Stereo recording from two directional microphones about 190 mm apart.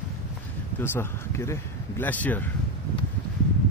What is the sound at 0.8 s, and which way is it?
Speech, 10° left (ahead or behind).